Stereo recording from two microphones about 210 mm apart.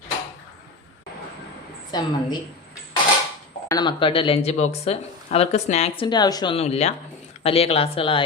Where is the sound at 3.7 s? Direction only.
20° left (ahead or behind).